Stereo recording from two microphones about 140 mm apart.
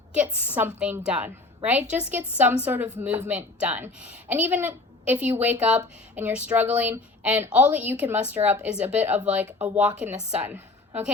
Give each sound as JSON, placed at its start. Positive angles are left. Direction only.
{"t": 0.1, "sound": "a woman's voice", "side_deg": -10}